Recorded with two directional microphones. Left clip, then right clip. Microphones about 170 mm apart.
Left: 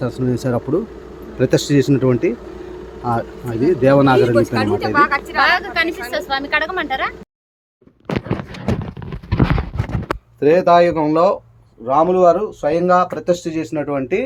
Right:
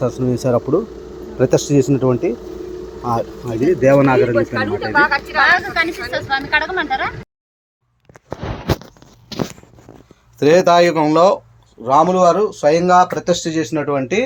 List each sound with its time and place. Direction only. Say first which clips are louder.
0.0 s speech: right 3 dB; centre (ahead or behind); by 4.4 s 20° left (ahead or behind)
4.4 s speech: left 1 dB; 90° left
5.4 s a woman's voice: right 2 dB; 50° left (ahead or behind)
10.4 s speech: right 1 dB; 15° right (ahead or behind)
11.9 s speech: right 1 dB; 35° right (ahead or behind)